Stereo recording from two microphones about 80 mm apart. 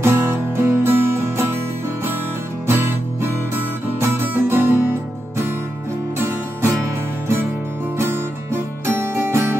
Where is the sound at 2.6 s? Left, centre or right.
Right.